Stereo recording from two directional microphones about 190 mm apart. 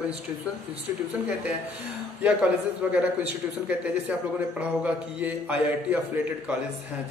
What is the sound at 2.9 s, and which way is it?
A man's voice, 5° right (ahead or behind).